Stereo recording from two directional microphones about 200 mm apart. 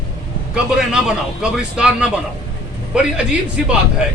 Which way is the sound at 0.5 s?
5° right (ahead or behind).